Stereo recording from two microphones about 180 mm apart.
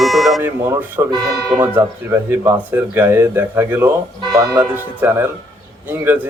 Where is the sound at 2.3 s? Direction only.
10° right (ahead or behind).